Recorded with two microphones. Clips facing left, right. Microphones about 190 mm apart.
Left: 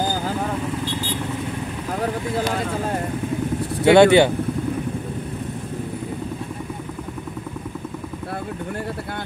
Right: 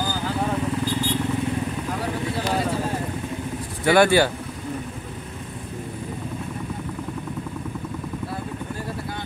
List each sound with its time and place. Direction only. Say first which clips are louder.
3.8 s speech: left 5 dB; 25° left (ahead or behind)